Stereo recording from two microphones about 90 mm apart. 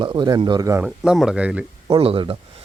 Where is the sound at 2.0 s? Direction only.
90° right.